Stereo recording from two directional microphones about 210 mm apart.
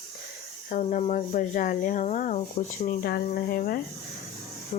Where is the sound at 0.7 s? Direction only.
35° left (ahead or behind).